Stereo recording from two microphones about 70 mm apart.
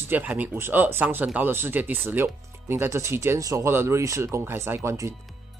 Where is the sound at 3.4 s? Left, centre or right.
Right.